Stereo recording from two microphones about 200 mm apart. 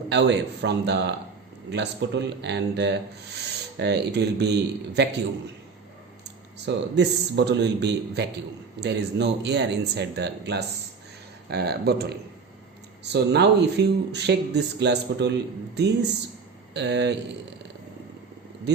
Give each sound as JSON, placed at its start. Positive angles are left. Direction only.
{"t": 0.1, "sound": "speech", "side_deg": -60}
{"t": 6.7, "sound": "speech", "side_deg": -55}
{"t": 13.1, "sound": "speech", "side_deg": -55}